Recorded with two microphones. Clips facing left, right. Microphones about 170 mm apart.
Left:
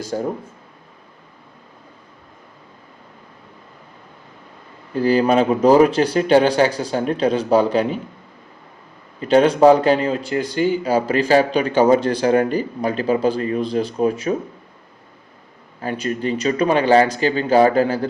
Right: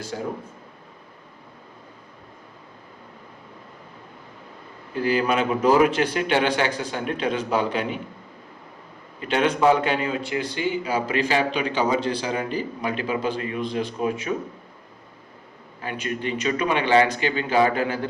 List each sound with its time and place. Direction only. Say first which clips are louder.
0.1 s speech: left 7 dB; 45° left (ahead or behind)
4.9 s a man's voice: left 6 dB; 35° left (ahead or behind)
9.2 s a man's voice: left 7 dB; 35° left (ahead or behind)
15.8 s a man's voice: left 6 dB; 35° left (ahead or behind)